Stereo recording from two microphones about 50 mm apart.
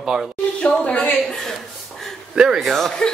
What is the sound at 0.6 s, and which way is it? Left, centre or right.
Speech, left.